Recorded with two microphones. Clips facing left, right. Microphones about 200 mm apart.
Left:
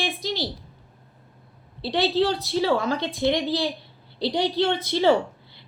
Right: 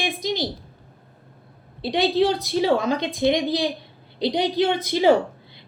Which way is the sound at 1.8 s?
15° right (ahead or behind).